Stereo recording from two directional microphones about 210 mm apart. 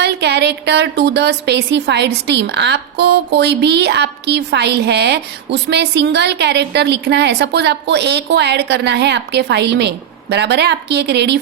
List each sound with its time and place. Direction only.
0.0 s a woman's voice: 55° right (ahead or behind)